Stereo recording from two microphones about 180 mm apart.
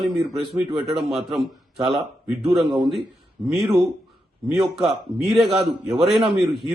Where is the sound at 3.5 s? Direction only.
20° right (ahead or behind).